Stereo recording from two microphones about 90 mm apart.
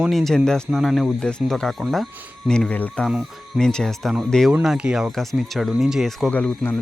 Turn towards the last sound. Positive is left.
turn(degrees=15)  # may be behind; listen again after turning